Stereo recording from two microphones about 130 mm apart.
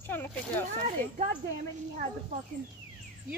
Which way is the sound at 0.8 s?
65° right (ahead or behind).